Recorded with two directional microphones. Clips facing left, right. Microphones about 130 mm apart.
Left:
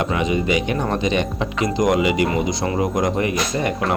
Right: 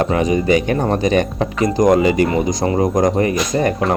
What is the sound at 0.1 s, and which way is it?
Speech, 40° right (ahead or behind).